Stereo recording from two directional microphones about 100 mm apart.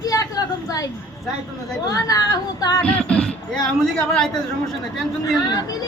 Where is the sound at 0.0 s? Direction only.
35° left (ahead or behind).